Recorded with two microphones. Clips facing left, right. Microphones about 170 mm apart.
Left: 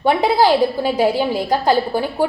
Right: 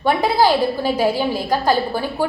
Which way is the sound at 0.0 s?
20° left (ahead or behind).